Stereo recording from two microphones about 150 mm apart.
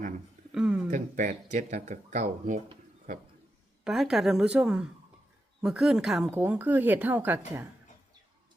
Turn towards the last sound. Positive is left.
turn(degrees=-15)  # may be behind; listen again after turning